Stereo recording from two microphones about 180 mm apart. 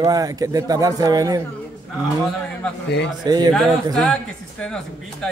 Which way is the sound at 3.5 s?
Centre (ahead or behind).